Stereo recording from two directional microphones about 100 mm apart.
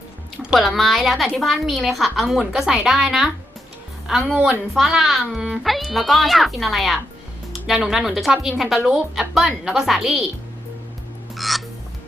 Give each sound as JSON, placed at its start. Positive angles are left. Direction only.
{"t": 0.5, "sound": "a woman's voice", "side_deg": 0}
{"t": 4.4, "sound": "speech", "side_deg": -20}
{"t": 4.7, "sound": "a woman's voice", "side_deg": -5}
{"t": 11.3, "sound": "music", "side_deg": 0}